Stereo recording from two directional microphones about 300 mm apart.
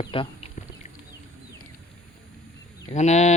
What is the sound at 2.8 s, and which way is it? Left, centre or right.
Speech, left.